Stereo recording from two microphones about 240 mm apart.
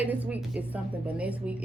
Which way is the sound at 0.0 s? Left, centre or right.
Centre.